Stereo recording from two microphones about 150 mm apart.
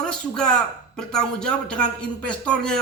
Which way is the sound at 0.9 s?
5° left (ahead or behind).